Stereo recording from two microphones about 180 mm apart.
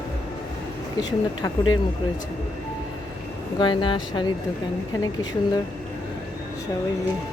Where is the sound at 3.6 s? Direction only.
25° left (ahead or behind).